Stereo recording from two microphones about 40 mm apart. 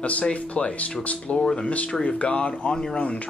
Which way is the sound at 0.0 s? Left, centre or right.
Left.